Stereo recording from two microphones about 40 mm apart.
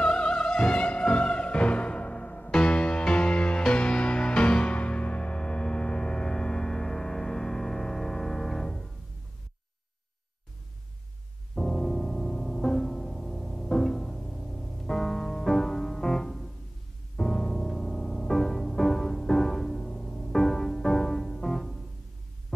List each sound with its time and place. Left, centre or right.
0.0 s opera: left
11.5 s music: centre